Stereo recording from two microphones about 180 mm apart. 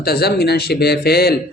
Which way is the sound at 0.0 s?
60° left (ahead or behind).